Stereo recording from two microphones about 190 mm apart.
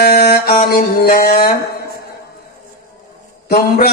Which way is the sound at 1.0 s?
50° left (ahead or behind).